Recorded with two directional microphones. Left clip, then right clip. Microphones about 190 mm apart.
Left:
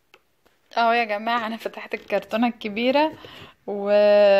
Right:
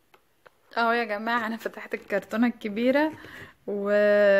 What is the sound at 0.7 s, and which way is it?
A woman's voice, centre (ahead or behind).